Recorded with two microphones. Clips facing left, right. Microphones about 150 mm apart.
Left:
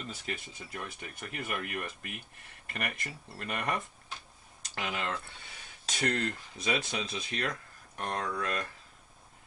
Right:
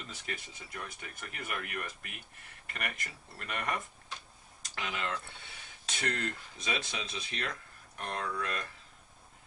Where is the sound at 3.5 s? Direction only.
35° left (ahead or behind).